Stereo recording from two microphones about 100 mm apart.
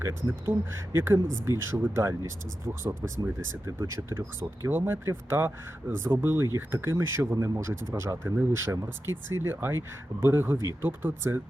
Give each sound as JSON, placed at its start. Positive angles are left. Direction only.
{"t": 0.0, "sound": "speech", "side_deg": -25}